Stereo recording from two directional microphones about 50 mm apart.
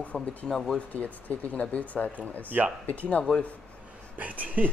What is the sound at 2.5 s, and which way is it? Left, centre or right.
Speech, right.